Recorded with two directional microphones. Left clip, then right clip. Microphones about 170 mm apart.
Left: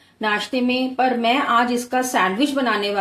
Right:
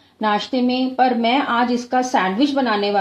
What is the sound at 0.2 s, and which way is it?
A woman's voice, 30° right (ahead or behind).